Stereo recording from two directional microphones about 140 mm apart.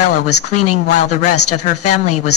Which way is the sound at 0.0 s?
55° left (ahead or behind).